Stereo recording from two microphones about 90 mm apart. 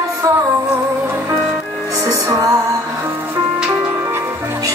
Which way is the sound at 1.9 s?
35° right (ahead or behind).